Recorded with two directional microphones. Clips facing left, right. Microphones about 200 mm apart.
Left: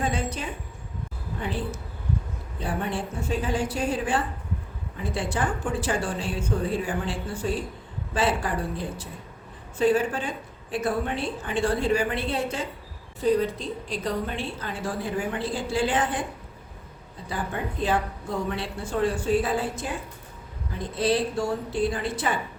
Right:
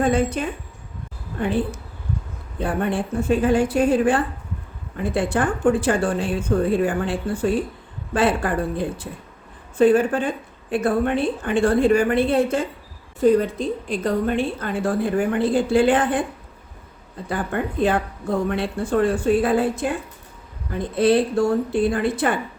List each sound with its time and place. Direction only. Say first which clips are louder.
0.0 s a woman's voice: right 9 dB; 55° right (ahead or behind)
17.2 s a woman's voice: right 6 dB; 55° right (ahead or behind)